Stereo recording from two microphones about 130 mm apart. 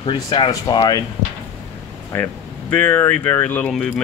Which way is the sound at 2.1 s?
15° left (ahead or behind).